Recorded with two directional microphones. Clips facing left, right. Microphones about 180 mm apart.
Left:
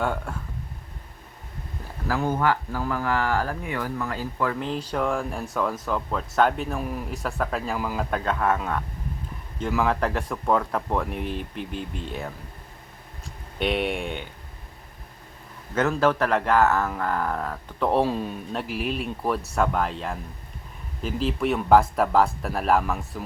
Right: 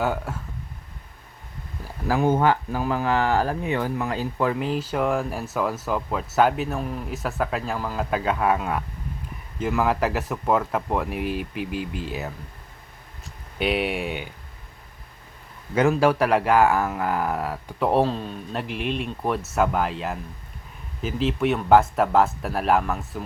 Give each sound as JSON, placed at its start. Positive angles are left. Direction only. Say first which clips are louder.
{"t": 0.0, "sound": "speech", "louder": "right 2 dB", "side_deg": -5}
{"t": 2.0, "sound": "speech", "louder": "right 4 dB", "side_deg": -20}
{"t": 4.6, "sound": "speech", "louder": "right 2 dB", "side_deg": -5}
{"t": 8.1, "sound": "speech", "louder": "right 3 dB", "side_deg": -10}
{"t": 13.6, "sound": "speech", "louder": "right 1 dB", "side_deg": -5}
{"t": 15.7, "sound": "speech", "louder": "right 3 dB", "side_deg": -10}
{"t": 18.0, "sound": "a man's voice", "louder": "even", "side_deg": 10}